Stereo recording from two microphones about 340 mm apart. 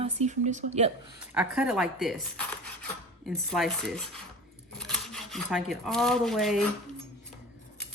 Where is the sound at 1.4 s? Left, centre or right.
Centre.